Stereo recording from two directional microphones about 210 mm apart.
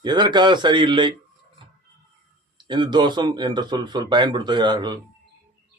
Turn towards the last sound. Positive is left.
turn(degrees=-20)  # may be behind; listen again after turning